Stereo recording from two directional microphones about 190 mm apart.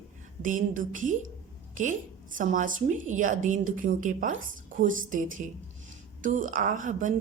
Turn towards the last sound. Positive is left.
turn(degrees=-45)  # may be behind; listen again after turning